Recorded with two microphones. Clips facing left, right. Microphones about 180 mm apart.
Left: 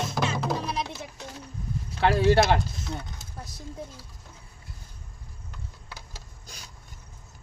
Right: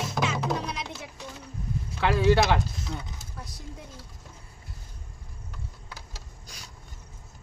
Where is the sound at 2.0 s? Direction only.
60° left (ahead or behind).